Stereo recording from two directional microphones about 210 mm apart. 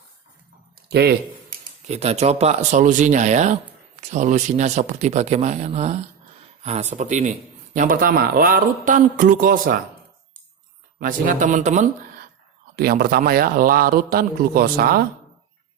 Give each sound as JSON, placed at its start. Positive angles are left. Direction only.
{"t": 0.8, "sound": "a sound", "side_deg": -45}
{"t": 1.9, "sound": "speech", "side_deg": -30}
{"t": 11.0, "sound": "speech", "side_deg": -40}
{"t": 12.7, "sound": "a man's voice", "side_deg": -45}